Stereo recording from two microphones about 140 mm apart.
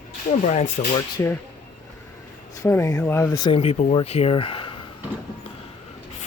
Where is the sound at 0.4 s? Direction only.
60° left (ahead or behind).